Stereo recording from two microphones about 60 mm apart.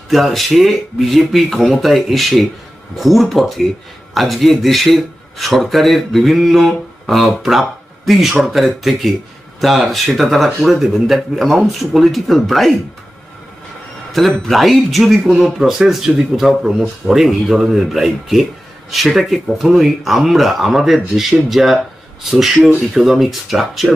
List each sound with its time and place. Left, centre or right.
0.1 s speech: centre
14.1 s speech: centre